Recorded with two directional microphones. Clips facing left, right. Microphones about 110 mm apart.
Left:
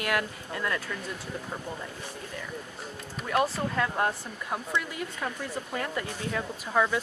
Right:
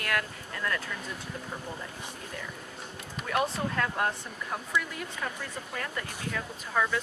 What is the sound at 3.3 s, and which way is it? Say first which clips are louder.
Speech: left 2 dB; 5° left (ahead or behind).